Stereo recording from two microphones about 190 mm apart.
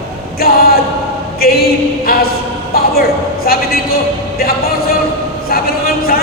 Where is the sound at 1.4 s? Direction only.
55° left (ahead or behind).